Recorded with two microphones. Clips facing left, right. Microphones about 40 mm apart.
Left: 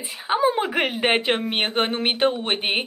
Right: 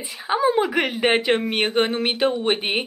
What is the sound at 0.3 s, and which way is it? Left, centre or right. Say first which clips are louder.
A woman's voice: right 1 dB; centre.